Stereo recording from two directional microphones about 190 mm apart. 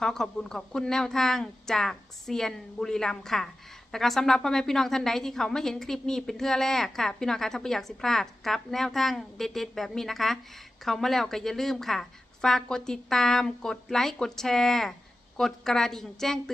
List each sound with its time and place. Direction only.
0.0 s a woman's voice: 5° left (ahead or behind)